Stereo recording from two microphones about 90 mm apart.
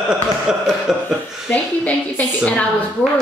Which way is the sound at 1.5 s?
15° left (ahead or behind).